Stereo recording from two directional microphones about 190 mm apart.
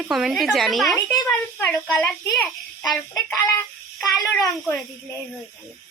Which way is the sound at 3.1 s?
10° left (ahead or behind).